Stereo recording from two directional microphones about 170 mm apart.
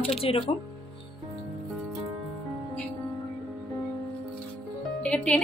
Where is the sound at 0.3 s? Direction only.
35° left (ahead or behind).